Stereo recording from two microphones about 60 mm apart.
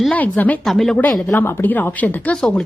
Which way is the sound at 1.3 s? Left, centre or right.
Left.